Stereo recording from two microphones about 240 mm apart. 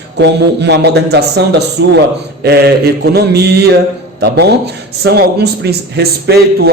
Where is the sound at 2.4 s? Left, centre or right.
Right.